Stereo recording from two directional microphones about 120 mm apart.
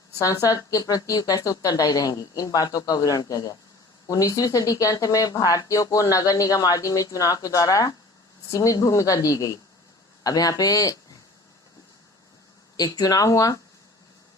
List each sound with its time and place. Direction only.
0.2 s a woman's voice: 30° left (ahead or behind)
12.7 s a woman's voice: 30° left (ahead or behind)